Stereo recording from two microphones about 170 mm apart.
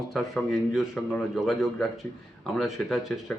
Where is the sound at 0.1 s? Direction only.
Centre (ahead or behind).